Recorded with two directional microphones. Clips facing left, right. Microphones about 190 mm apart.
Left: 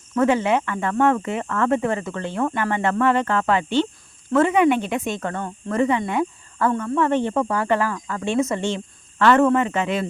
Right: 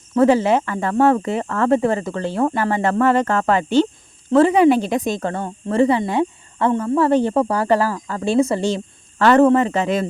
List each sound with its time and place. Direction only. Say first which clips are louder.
0.2 s speech: right 4 dB; 35° right (ahead or behind)